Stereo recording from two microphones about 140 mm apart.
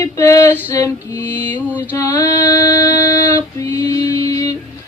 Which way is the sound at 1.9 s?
20° left (ahead or behind).